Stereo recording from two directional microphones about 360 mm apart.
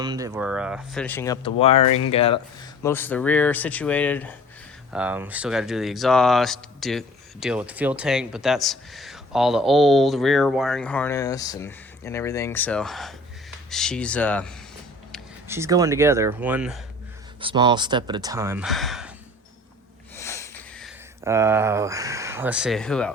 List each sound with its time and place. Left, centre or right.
0.0 s speech: centre
15.1 s speech: centre
20.1 s sniff: centre